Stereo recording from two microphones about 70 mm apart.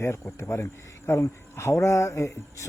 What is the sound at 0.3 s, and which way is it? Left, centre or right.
Speech, left.